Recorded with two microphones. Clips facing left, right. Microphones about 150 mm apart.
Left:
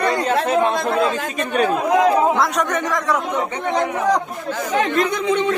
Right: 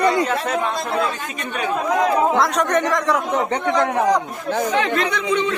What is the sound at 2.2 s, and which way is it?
A man's voice, centre (ahead or behind).